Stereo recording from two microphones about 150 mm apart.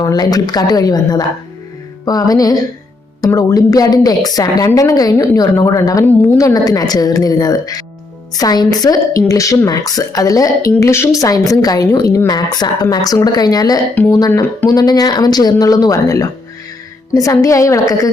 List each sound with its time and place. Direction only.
0.0 s speech: 25° left (ahead or behind)